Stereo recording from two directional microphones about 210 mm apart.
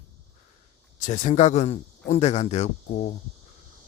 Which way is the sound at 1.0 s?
35° left (ahead or behind).